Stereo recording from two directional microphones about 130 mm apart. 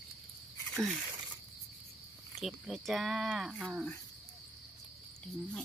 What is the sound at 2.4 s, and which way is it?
Speech, centre (ahead or behind).